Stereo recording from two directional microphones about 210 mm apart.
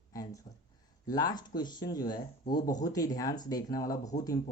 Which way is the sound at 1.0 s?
20° left (ahead or behind).